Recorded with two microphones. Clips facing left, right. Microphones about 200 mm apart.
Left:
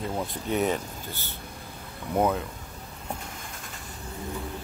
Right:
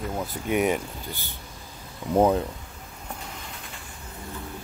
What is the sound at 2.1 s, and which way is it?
Speech, 30° right (ahead or behind).